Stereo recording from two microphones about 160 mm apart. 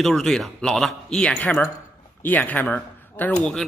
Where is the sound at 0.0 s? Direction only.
Centre (ahead or behind).